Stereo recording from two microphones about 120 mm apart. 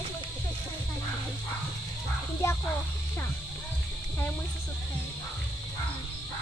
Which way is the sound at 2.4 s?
20° left (ahead or behind).